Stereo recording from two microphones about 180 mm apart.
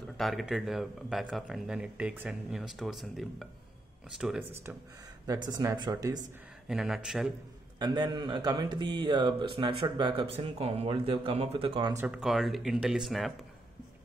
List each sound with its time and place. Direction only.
0.2 s speech: centre (ahead or behind); by 6.1 s 20° right (ahead or behind)
6.7 s speech: centre (ahead or behind)
7.8 s speech: 25° right (ahead or behind)
12.2 s speech: centre (ahead or behind)